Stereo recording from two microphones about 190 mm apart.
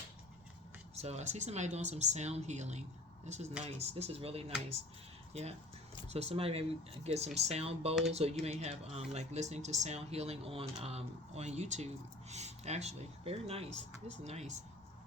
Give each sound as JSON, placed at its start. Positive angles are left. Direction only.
{"t": 0.9, "sound": "speech", "side_deg": -35}